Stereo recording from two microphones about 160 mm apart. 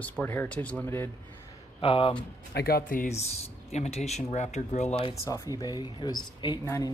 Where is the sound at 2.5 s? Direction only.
75° left (ahead or behind).